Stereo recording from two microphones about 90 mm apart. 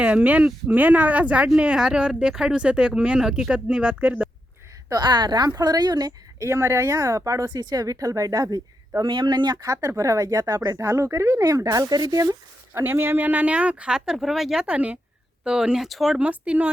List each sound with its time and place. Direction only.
0.0 s speech: 15° right (ahead or behind)
4.9 s speech: 55° right (ahead or behind)
6.4 s speech: 30° right (ahead or behind)
9.0 s speech: 65° right (ahead or behind)
9.6 s speech: 35° right (ahead or behind)
12.7 s speech: 25° right (ahead or behind)